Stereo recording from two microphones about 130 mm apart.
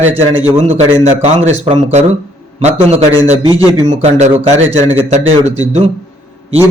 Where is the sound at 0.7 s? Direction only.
55° right (ahead or behind).